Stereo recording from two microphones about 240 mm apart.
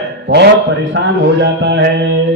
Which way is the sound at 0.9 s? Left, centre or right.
Right.